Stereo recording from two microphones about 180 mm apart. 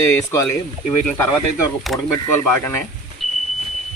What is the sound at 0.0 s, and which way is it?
Speech, 15° left (ahead or behind).